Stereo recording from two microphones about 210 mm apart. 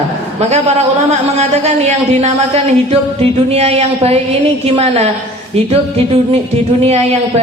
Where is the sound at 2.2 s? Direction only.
30° right (ahead or behind).